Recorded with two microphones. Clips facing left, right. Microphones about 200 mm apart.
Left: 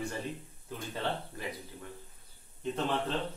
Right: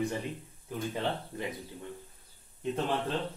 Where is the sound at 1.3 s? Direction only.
20° right (ahead or behind).